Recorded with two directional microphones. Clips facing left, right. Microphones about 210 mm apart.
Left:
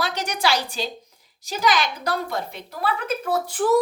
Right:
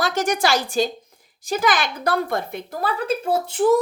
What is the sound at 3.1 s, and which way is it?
Speech, 25° right (ahead or behind).